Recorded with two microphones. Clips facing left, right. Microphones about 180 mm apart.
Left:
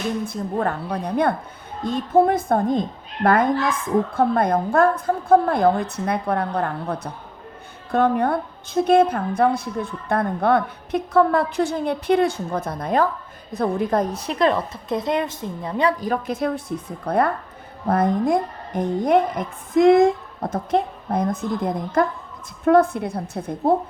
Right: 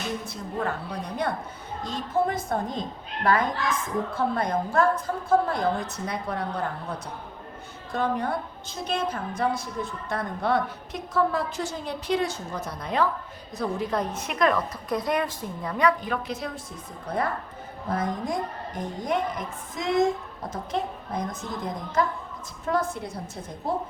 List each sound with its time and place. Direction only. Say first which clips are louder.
0.3 s a woman's voice: left 6 dB; 50° left (ahead or behind)